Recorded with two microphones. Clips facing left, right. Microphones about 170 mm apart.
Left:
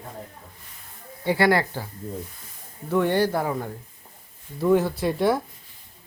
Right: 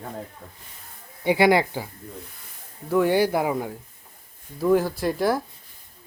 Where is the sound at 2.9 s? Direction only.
5° right (ahead or behind).